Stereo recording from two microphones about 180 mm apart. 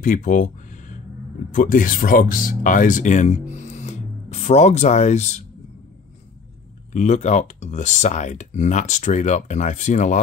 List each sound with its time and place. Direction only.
0.0 s a sound: 45° left (ahead or behind)
1.5 s speech: 45° left (ahead or behind)
6.9 s speech: 40° left (ahead or behind)